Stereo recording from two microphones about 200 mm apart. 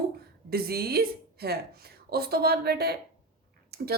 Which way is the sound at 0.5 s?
50° right (ahead or behind).